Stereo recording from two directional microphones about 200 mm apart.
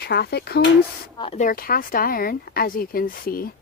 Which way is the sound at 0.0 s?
55° left (ahead or behind).